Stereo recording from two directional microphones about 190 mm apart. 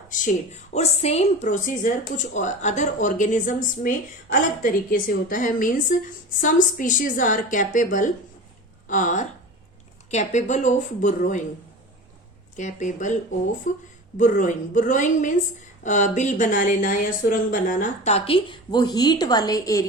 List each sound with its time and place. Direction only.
0.7 s a woman's voice: 35° left (ahead or behind)
12.5 s a woman's voice: 40° left (ahead or behind); by 19.8 s 20° left (ahead or behind)